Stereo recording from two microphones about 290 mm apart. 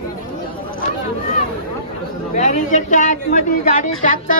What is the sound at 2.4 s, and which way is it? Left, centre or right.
Speech, left.